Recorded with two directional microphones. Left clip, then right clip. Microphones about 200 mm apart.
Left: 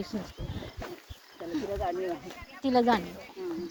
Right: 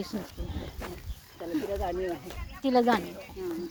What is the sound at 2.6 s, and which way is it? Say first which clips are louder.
Speech: right 1 dB; 20° left (ahead or behind).